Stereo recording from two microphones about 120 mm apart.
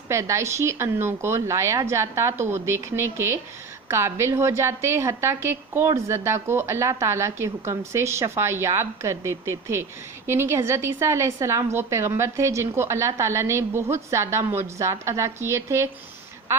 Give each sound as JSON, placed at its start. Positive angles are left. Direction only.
{"t": 0.1, "sound": "a woman's voice", "side_deg": -25}